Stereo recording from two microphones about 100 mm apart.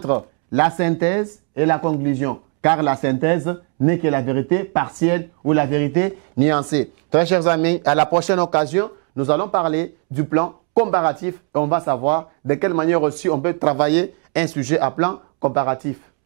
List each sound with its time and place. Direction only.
0.0 s speech: 15° right (ahead or behind)
14.4 s speech: 25° right (ahead or behind)